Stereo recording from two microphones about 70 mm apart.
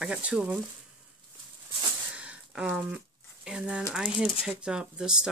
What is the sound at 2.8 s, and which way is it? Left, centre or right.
Speech, centre.